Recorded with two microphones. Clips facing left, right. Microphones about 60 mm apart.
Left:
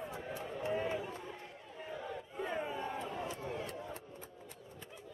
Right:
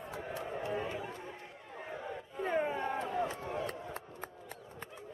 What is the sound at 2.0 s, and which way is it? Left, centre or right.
Crowd, right.